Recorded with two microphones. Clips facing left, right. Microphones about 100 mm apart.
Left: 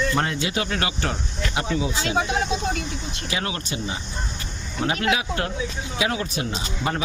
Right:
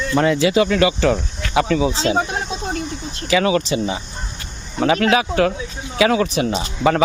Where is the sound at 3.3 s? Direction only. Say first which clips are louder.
Right 13 dB; 90° right.